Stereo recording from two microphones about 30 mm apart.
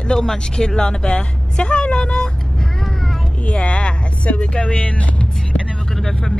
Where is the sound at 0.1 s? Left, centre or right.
Centre; by 2.2 s left.